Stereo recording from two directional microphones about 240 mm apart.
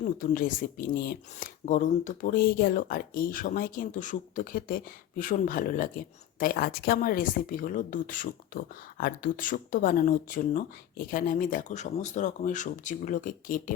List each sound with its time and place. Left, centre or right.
0.2 s speech: left